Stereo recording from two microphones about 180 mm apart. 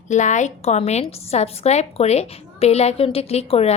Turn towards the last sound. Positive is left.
turn(degrees=35)  # may be behind; listen again after turning